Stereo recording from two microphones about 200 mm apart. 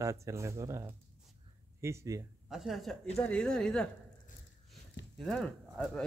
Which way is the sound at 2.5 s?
Centre (ahead or behind).